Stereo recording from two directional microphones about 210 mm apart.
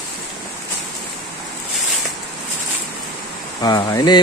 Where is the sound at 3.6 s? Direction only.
20° left (ahead or behind).